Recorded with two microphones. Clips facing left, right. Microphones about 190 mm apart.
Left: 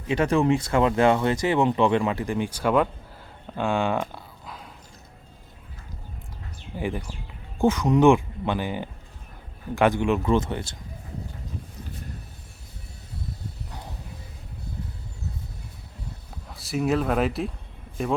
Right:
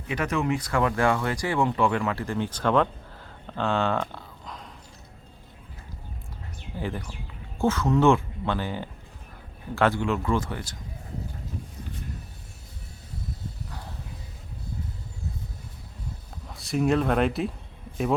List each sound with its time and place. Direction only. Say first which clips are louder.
0.1 s speech: left 5 dB; 30° left (ahead or behind); by 4.7 s 5° left (ahead or behind)
6.7 s speech: left 3 dB; 15° left (ahead or behind)
16.5 s speech: right 1 dB; centre (ahead or behind)